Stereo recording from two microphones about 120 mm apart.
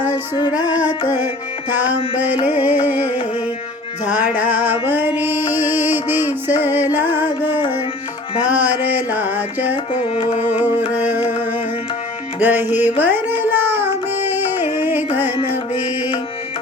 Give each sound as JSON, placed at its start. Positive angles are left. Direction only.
{"t": 2.1, "sound": "music", "side_deg": -15}
{"t": 9.7, "sound": "music", "side_deg": 60}
{"t": 10.5, "sound": "music", "side_deg": -15}
{"t": 12.4, "sound": "music", "side_deg": -15}